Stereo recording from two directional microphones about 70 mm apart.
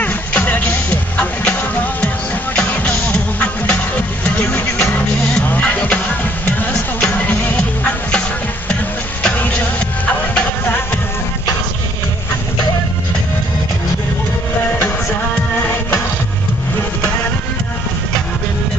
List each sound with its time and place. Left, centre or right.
0.0 s music: left
9.2 s music: left